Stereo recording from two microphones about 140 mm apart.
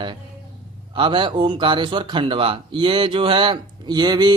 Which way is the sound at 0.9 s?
35° right (ahead or behind).